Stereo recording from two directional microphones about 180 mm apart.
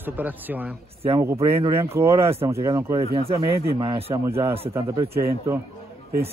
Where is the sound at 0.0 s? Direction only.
10° right (ahead or behind).